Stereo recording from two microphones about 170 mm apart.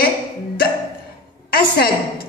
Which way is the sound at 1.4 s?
65° left (ahead or behind).